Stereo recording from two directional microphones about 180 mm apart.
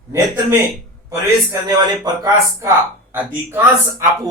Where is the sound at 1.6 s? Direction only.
25° right (ahead or behind).